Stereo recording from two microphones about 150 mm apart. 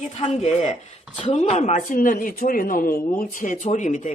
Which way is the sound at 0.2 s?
45° left (ahead or behind).